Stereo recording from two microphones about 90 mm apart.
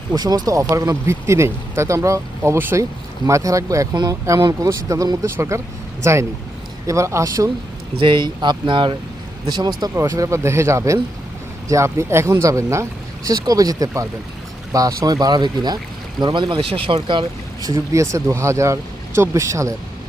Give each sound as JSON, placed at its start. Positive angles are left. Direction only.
{"t": 0.1, "sound": "speech", "side_deg": -45}
{"t": 4.7, "sound": "speech", "side_deg": -35}
{"t": 7.9, "sound": "speech", "side_deg": -65}
{"t": 9.5, "sound": "speech", "side_deg": -50}
{"t": 9.9, "sound": "speech", "side_deg": -35}
{"t": 13.4, "sound": "speech", "side_deg": -45}
{"t": 16.2, "sound": "speech", "side_deg": -60}
{"t": 17.6, "sound": "speech", "side_deg": -35}